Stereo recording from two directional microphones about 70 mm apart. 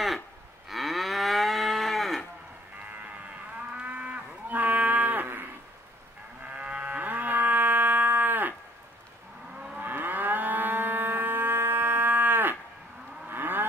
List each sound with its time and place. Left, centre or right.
0.7 s moo: centre
3.5 s moo: centre
6.5 s livestock: centre
9.8 s livestock: right
13.3 s a sound: right